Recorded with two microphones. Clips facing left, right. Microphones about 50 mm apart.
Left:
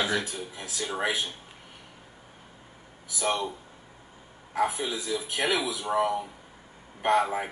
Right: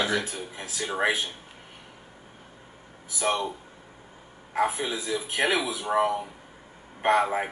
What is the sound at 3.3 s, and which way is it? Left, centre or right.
A man's voice, centre.